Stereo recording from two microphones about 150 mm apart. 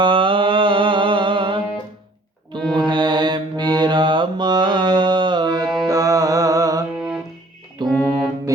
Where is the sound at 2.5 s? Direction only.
30° right (ahead or behind).